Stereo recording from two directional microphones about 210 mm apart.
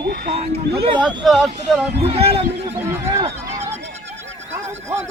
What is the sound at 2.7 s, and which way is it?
Speech, 10° right (ahead or behind).